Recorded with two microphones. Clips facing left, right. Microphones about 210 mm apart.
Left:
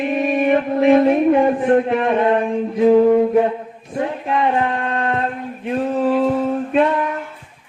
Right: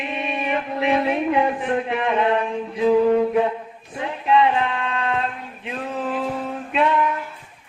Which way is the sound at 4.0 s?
45° left (ahead or behind).